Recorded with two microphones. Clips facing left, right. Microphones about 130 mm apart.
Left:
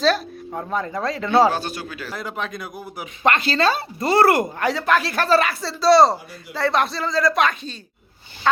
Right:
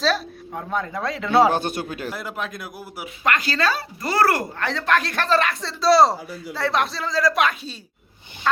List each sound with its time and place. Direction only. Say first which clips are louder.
0.0 s speech: left 3 dB; centre (ahead or behind)
3.2 s speech: left 3 dB; 25° left (ahead or behind)
4.7 s speech: right 1 dB; 5° left (ahead or behind)